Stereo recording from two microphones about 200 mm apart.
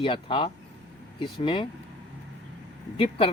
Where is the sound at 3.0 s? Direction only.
30° left (ahead or behind).